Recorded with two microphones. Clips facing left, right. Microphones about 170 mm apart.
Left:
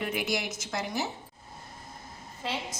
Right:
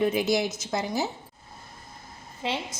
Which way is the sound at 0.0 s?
25° right (ahead or behind).